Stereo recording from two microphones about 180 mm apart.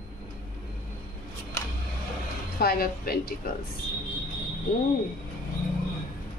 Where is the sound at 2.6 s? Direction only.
55° left (ahead or behind).